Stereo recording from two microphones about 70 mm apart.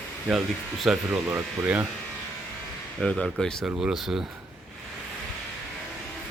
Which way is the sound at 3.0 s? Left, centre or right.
Centre.